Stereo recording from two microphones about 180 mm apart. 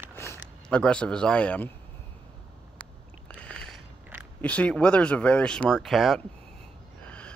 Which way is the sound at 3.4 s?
5° left (ahead or behind).